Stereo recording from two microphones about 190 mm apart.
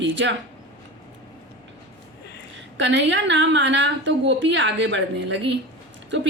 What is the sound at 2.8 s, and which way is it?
A woman's voice, 70° right (ahead or behind).